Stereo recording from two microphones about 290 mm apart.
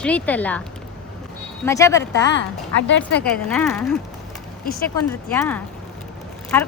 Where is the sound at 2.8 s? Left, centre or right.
Left.